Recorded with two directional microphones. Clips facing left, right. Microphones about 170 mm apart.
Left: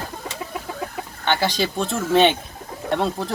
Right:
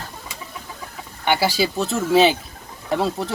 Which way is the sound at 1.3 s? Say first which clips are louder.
Right 2 dB; 10° right (ahead or behind).